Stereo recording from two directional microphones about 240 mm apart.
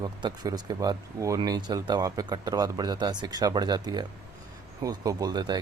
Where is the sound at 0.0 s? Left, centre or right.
Centre.